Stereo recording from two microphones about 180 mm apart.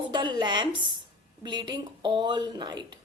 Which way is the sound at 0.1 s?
25° right (ahead or behind).